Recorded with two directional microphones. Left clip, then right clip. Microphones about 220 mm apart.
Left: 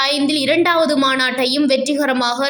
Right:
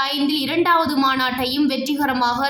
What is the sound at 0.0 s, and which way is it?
A woman's voice, 20° left (ahead or behind).